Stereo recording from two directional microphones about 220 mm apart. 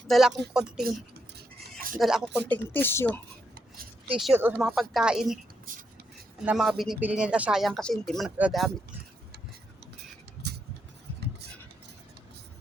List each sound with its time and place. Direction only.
0.1 s speech: centre (ahead or behind)
2.0 s speech: 5° right (ahead or behind)
2.5 s speech: 10° left (ahead or behind)
4.2 s speech: 5° right (ahead or behind)
6.4 s speech: 5° right (ahead or behind)
10.4 s a sound: 45° right (ahead or behind)